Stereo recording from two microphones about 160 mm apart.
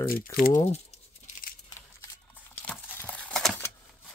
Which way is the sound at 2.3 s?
10° left (ahead or behind).